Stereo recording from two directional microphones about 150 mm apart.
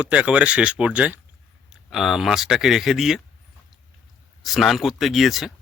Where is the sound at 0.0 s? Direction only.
5° right (ahead or behind).